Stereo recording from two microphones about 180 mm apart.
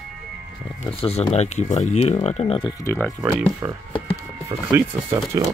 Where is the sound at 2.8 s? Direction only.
15° left (ahead or behind).